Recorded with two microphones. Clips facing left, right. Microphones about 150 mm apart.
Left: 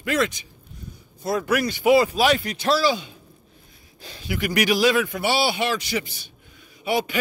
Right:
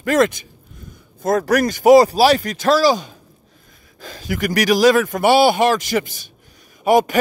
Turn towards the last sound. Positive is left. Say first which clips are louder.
# right 9 dB
turn(degrees=-45)  # may be behind; listen again after turning